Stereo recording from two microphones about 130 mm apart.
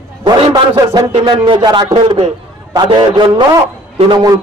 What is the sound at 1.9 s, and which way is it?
A man's voice, 45° right (ahead or behind).